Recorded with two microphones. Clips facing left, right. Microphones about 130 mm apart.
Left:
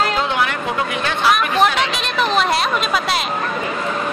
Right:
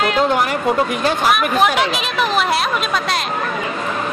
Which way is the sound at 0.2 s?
45° right (ahead or behind).